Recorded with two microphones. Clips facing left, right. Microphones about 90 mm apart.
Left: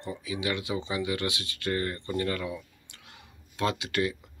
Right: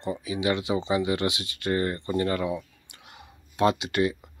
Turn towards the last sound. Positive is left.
turn(degrees=-25)  # may be behind; listen again after turning